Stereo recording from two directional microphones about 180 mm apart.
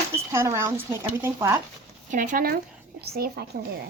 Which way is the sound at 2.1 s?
45° right (ahead or behind).